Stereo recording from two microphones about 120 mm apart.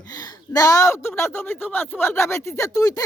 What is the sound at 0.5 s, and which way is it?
Speech, 30° left (ahead or behind).